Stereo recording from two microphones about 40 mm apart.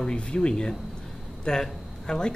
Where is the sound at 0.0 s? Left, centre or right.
Left.